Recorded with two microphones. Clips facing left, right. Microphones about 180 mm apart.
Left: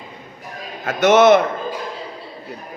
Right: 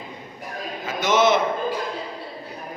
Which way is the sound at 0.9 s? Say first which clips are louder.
Left 7 dB; 65° left (ahead or behind).